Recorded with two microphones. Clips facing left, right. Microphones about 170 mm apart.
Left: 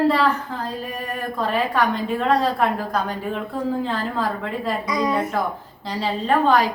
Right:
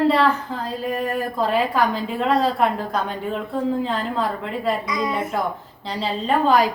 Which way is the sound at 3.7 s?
Centre (ahead or behind).